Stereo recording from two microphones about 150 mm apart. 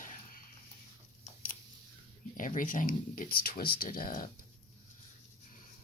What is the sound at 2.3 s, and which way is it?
Speech, 65° left (ahead or behind).